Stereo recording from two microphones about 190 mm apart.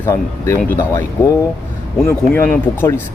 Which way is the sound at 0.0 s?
15° left (ahead or behind).